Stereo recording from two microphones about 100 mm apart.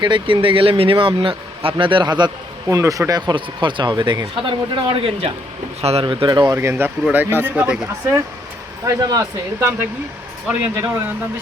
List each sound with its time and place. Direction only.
0.0 s speech: 50° right (ahead or behind)
2.6 s speech: 30° right (ahead or behind)
3.1 s speech: 45° right (ahead or behind); by 5.3 s 65° right (ahead or behind)
5.8 s a man's voice: 90° right
6.1 s speech: 50° right (ahead or behind)
6.4 s speech: 30° right (ahead or behind); by 8.1 s 15° right (ahead or behind)
8.8 s speech: 30° right (ahead or behind)
10.8 s speech: 25° right (ahead or behind)